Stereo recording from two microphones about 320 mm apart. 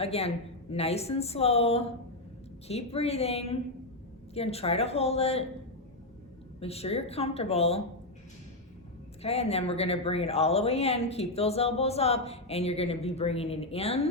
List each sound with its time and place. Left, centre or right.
0.0 s speech: centre
6.6 s speech: centre
9.2 s speech: centre